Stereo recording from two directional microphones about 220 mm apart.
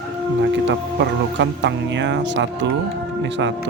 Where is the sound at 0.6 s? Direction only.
55° right (ahead or behind).